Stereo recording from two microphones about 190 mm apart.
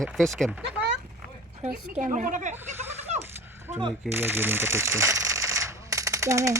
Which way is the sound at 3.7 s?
35° right (ahead or behind).